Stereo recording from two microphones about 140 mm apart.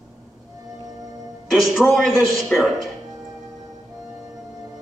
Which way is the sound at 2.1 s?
25° right (ahead or behind).